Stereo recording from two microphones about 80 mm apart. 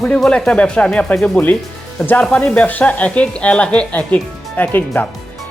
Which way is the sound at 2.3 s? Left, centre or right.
Centre.